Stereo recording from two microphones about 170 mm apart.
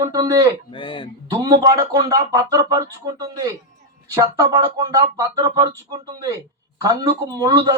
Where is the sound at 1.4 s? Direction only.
20° right (ahead or behind).